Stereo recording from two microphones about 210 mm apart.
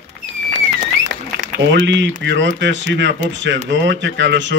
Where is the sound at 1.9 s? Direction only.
60° right (ahead or behind).